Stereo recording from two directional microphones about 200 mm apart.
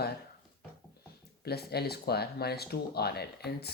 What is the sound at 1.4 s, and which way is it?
Speech, 50° left (ahead or behind).